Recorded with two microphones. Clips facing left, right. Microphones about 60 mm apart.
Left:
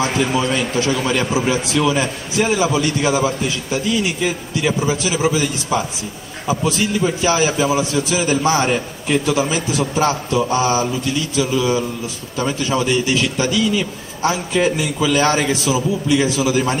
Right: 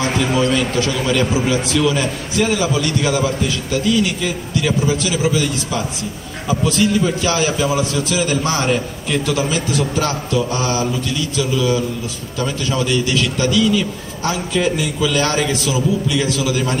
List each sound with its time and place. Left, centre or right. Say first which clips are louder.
0.4 s a man's voice: right 2 dB; centre